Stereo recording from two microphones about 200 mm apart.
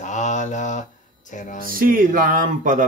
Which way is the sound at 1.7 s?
45° right (ahead or behind).